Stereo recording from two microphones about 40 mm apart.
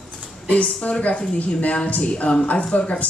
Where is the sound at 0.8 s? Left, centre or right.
Left.